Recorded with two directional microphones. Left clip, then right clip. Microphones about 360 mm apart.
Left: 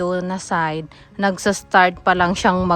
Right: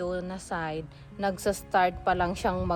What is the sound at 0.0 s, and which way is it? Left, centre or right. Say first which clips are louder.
A woman's voice: left 10 dB; left.